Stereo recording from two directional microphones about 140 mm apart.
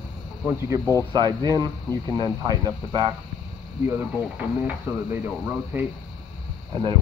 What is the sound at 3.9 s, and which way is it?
Speech, 10° right (ahead or behind).